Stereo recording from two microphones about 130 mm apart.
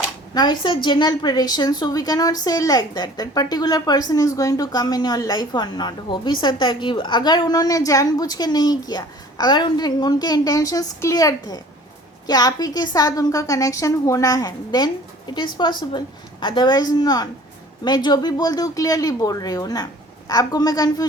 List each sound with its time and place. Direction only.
0.3 s a woman's voice: 35° left (ahead or behind)